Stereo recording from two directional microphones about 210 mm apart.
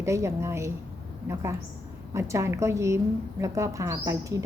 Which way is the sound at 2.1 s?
15° right (ahead or behind).